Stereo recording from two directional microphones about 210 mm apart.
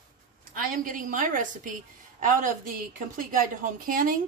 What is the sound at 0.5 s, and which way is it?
Speech, 40° right (ahead or behind).